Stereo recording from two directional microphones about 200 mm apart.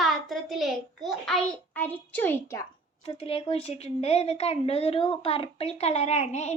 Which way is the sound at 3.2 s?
30° left (ahead or behind).